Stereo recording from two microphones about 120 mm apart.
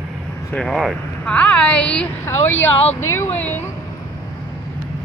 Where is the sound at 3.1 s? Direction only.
20° left (ahead or behind).